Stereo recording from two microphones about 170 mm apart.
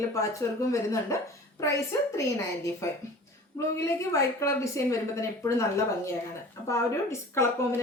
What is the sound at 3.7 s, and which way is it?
Speech, 15° left (ahead or behind).